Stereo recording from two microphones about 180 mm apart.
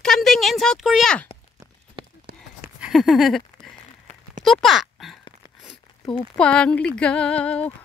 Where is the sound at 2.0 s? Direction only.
25° right (ahead or behind).